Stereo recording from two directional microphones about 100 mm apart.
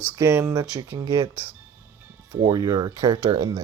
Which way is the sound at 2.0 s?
25° right (ahead or behind).